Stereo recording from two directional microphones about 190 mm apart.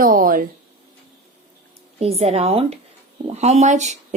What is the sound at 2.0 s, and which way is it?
Speech, 35° right (ahead or behind).